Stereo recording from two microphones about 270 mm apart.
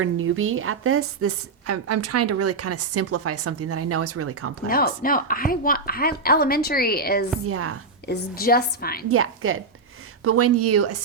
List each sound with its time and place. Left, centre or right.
0.0 s a woman's voice: right
4.6 s a woman's voice: left
7.4 s a woman's voice: right
8.0 s a woman's voice: left
9.0 s a woman's voice: right